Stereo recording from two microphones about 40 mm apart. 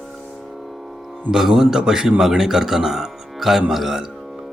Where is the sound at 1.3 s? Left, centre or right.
Centre.